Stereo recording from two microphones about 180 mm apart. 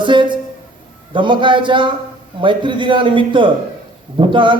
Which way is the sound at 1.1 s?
25° right (ahead or behind).